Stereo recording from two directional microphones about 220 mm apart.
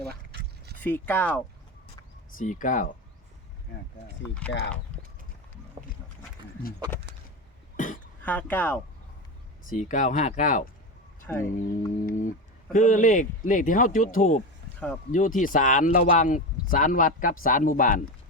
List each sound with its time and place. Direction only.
0.3 s a sound: 50° right (ahead or behind)
0.8 s speech: 10° left (ahead or behind)
2.4 s speech: 35° left (ahead or behind)
8.2 s speech: 5° left (ahead or behind)
9.6 s speech: 35° left (ahead or behind)
11.3 s speech: 10° left (ahead or behind)
12.0 s speech: 35° left (ahead or behind)
14.6 s a sound: 50° right (ahead or behind)
15.1 s speech: 35° left (ahead or behind)